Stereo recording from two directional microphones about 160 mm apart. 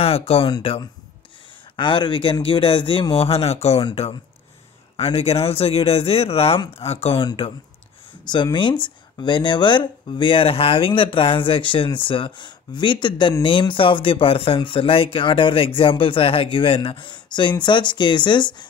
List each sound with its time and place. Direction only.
0.0 s speech: 35° left (ahead or behind)